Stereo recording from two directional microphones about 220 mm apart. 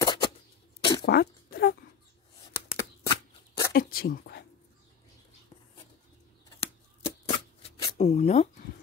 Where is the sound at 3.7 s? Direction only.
45° left (ahead or behind).